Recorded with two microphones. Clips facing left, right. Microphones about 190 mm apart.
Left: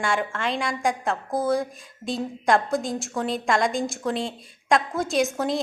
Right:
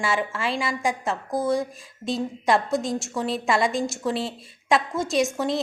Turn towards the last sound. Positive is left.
turn(degrees=0)  # may be behind; listen again after turning